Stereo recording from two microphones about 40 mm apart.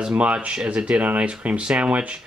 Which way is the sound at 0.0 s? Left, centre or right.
Right.